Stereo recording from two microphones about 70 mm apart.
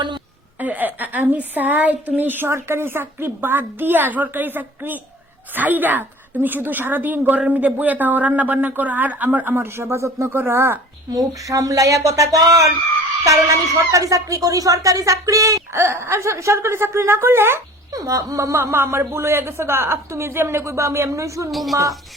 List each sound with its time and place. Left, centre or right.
0.6 s a woman's voice: right
11.1 s speech: right
15.7 s speech: right
17.9 s speech: right
21.5 s speech: centre